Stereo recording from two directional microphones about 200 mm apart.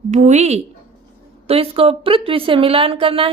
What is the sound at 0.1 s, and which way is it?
A woman's voice, 35° right (ahead or behind).